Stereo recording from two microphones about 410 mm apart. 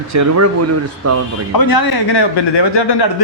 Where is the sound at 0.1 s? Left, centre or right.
Right.